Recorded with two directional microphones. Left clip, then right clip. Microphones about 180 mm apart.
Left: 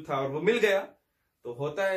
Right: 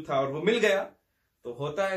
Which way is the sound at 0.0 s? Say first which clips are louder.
Right 1 dB; 15° left (ahead or behind).